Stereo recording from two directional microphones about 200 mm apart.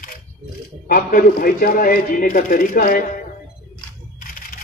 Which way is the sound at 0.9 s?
45° left (ahead or behind).